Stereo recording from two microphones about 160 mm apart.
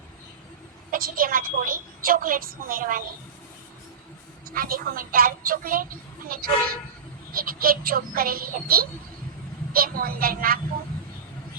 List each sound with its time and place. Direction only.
0.9 s a woman's voice: 65° right (ahead or behind)
4.4 s a woman's voice: 65° right (ahead or behind)